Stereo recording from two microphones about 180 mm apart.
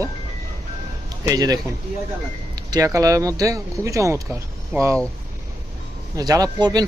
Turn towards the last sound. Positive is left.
turn(degrees=-20)  # may be behind; listen again after turning